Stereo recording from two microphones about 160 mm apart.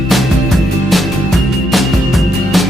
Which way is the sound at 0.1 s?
Centre (ahead or behind).